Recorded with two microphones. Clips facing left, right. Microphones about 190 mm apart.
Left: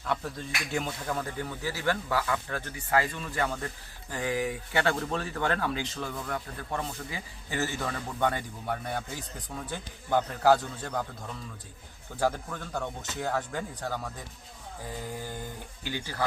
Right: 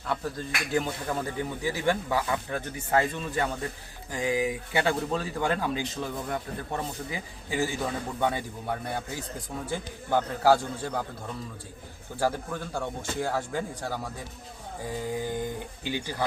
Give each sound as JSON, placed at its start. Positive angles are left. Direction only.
{"t": 0.1, "sound": "speech", "side_deg": 0}
{"t": 1.1, "sound": "speech", "side_deg": -15}
{"t": 12.2, "sound": "speech", "side_deg": -10}